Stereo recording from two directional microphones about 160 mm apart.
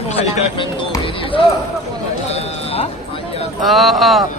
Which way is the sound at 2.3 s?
40° left (ahead or behind).